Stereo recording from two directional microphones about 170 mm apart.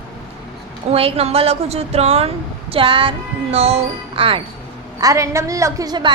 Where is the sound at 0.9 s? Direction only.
35° right (ahead or behind).